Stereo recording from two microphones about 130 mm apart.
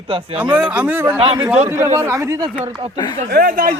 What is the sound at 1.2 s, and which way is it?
Speech, 45° right (ahead or behind).